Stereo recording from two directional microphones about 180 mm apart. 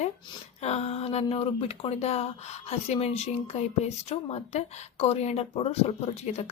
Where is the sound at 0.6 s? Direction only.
35° left (ahead or behind).